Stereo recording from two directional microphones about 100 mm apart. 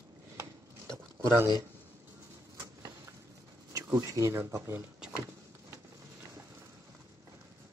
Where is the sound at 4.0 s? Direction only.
35° right (ahead or behind).